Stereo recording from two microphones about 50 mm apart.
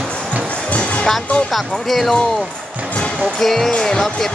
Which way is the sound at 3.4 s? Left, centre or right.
Centre.